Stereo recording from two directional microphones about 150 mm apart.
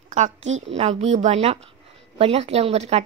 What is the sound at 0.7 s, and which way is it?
Speech, 45° right (ahead or behind).